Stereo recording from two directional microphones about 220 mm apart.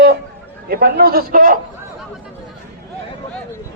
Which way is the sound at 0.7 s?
45° right (ahead or behind).